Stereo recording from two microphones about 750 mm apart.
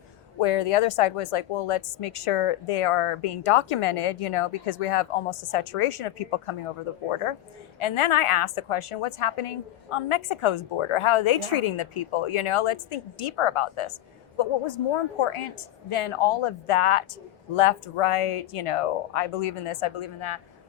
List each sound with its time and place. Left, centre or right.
0.3 s a woman's voice: left